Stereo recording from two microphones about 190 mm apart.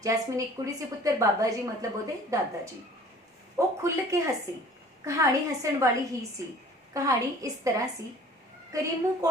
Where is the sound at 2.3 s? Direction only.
15° right (ahead or behind).